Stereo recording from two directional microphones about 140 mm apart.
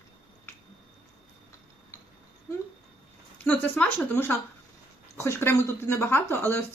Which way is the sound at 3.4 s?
10° left (ahead or behind).